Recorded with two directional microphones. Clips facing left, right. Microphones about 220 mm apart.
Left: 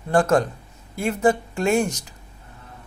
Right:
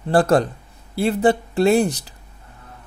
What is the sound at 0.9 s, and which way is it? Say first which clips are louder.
Speech: right 3 dB; 35° right (ahead or behind).